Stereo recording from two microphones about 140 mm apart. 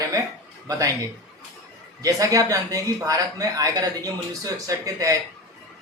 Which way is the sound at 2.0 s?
25° right (ahead or behind).